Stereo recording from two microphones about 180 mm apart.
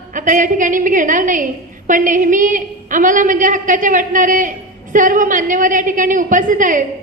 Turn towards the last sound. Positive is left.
turn(degrees=-45)  # may be behind; listen again after turning